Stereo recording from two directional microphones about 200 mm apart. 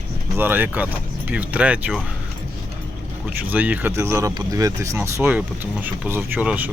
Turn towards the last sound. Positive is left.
turn(degrees=-5)  # may be behind; listen again after turning